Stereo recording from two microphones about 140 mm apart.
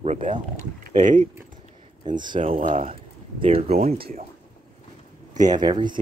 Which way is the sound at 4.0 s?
90° right.